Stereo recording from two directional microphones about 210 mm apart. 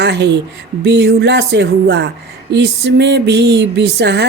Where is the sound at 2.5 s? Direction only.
55° right (ahead or behind).